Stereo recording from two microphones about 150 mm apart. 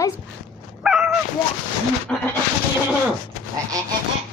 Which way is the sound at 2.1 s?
5° left (ahead or behind).